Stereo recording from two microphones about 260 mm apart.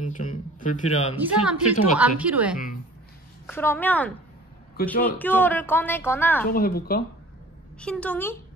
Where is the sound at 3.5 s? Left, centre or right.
Centre.